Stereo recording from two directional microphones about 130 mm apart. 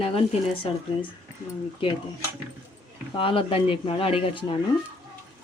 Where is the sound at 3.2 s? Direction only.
45° left (ahead or behind).